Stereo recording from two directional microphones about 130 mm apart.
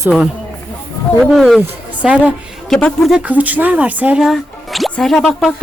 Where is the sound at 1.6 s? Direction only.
10° right (ahead or behind).